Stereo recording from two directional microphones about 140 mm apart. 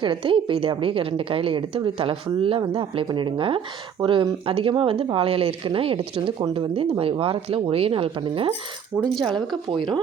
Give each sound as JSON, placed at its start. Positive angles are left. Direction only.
{"t": 0.0, "sound": "a woman's voice", "side_deg": -40}
{"t": 9.0, "sound": "speech", "side_deg": 5}
{"t": 9.6, "sound": "a woman's voice", "side_deg": -35}